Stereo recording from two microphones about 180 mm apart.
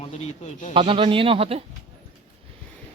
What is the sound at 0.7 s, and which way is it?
Speech, 30° right (ahead or behind).